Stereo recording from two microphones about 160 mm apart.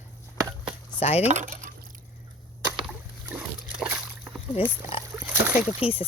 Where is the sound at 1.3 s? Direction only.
50° right (ahead or behind).